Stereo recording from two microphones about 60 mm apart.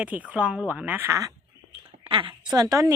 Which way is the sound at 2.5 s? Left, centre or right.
Right.